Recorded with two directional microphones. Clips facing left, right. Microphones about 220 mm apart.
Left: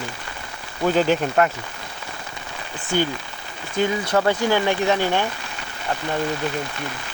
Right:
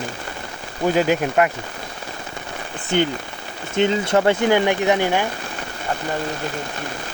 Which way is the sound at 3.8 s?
25° right (ahead or behind).